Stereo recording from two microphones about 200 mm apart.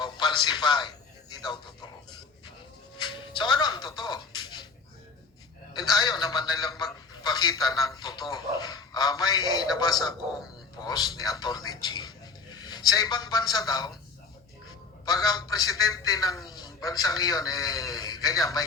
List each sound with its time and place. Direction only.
0.0 s television: 20° left (ahead or behind)
1.5 s a man's voice: 20° left (ahead or behind)
3.4 s a man's voice: 20° left (ahead or behind)
6.0 s a man's voice: 20° left (ahead or behind)
15.0 s a man's voice: 20° left (ahead or behind)